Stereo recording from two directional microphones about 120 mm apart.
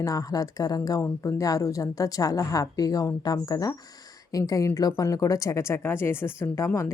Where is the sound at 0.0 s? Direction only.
30° left (ahead or behind).